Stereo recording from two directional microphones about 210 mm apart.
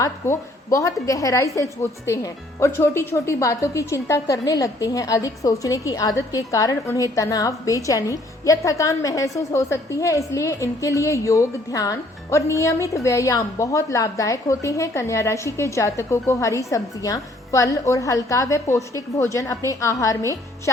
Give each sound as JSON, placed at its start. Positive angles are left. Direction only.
{"t": 0.0, "sound": "speech", "side_deg": 15}